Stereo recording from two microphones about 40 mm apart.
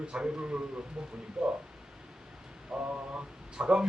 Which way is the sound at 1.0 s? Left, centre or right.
Centre.